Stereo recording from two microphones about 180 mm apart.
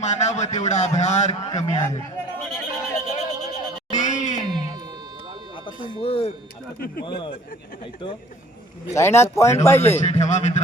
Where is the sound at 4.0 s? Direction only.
45° left (ahead or behind).